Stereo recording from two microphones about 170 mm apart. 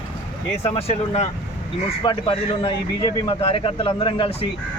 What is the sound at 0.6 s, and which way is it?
Speech, 35° left (ahead or behind).